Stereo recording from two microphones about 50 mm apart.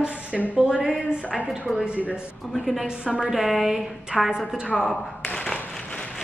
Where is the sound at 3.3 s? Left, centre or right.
Centre.